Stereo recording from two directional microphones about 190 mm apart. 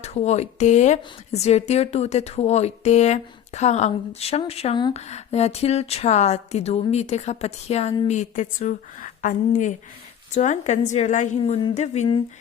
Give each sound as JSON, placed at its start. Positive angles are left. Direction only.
{"t": 0.0, "sound": "speech", "side_deg": 35}
{"t": 4.9, "sound": "speech", "side_deg": 35}